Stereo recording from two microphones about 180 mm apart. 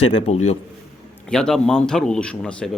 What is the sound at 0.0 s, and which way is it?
Speech, 35° left (ahead or behind).